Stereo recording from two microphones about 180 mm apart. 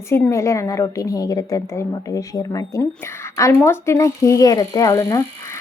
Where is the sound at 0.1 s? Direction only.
15° left (ahead or behind).